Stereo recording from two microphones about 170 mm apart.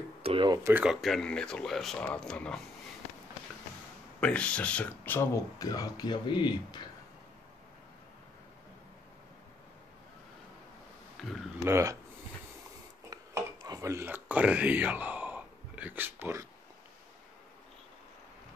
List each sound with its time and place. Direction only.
0.2 s a sound: 30° right (ahead or behind)
0.7 s speech: 10° right (ahead or behind)
1.0 s speech: 5° left (ahead or behind)
4.2 s speech: 5° left (ahead or behind); by 6.8 s 25° left (ahead or behind)
11.6 s speech: 15° right (ahead or behind)
13.1 s a sound: 20° right (ahead or behind)